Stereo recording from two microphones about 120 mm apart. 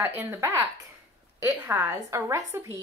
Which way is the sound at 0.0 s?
15° right (ahead or behind).